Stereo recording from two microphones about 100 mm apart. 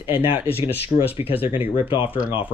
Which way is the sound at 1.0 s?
70° left (ahead or behind).